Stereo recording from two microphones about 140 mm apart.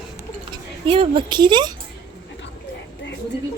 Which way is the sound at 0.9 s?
40° right (ahead or behind).